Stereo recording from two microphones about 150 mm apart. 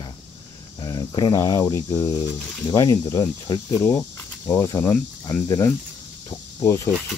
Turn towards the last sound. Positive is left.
turn(degrees=20)  # may be behind; listen again after turning